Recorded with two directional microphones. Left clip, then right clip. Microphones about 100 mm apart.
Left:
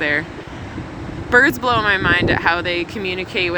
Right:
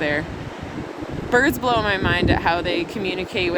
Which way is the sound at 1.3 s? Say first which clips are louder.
Left 4 dB; 30° right (ahead or behind).